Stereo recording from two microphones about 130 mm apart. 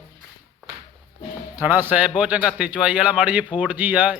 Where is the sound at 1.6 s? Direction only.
15° right (ahead or behind).